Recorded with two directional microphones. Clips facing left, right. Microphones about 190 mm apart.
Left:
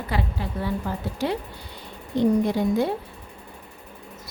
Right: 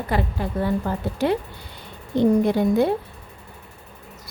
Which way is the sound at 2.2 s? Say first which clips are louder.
Right 3 dB; 55° right (ahead or behind).